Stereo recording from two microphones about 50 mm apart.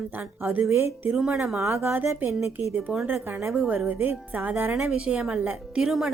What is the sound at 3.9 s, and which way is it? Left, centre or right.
Speech, right.